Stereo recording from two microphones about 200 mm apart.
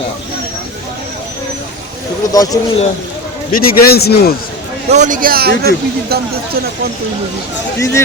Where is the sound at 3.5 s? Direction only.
50° left (ahead or behind).